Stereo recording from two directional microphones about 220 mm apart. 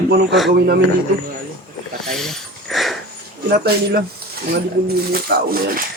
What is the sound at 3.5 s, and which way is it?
Speech, 45° right (ahead or behind).